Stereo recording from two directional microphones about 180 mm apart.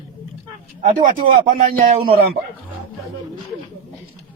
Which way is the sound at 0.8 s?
45° right (ahead or behind).